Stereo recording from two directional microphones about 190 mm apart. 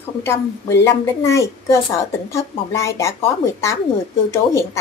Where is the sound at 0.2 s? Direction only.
15° left (ahead or behind).